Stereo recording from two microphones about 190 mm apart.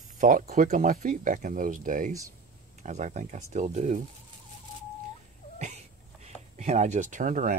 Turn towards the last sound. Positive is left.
turn(degrees=-40)  # may be behind; listen again after turning